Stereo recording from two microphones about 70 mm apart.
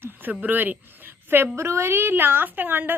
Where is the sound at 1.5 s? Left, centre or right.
Right.